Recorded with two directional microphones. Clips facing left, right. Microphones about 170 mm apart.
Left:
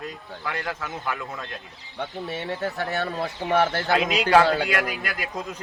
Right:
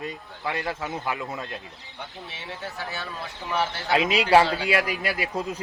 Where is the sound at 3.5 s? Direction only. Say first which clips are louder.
Left 5 dB; 60° left (ahead or behind).